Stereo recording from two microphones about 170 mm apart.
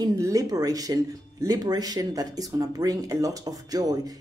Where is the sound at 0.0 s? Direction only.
20° right (ahead or behind).